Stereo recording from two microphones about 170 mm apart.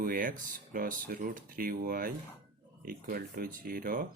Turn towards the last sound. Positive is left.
turn(degrees=-55)  # may be behind; listen again after turning